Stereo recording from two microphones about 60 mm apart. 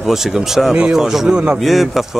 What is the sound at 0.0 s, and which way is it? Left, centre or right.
A man's voice, centre.